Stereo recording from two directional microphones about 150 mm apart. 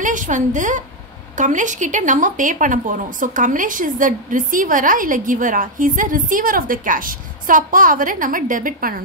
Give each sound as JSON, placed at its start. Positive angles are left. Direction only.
{"t": 0.0, "sound": "speech", "side_deg": -60}